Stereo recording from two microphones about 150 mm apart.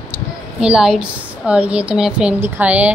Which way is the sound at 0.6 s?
5° right (ahead or behind).